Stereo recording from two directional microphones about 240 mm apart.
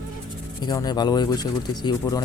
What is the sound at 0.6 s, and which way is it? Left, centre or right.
Speech, centre.